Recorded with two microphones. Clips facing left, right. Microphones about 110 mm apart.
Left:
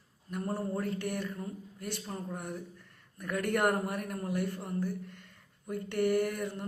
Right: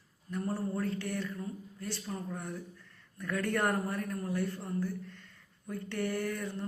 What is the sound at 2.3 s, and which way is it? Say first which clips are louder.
Mantra: left 1 dB; 15° left (ahead or behind).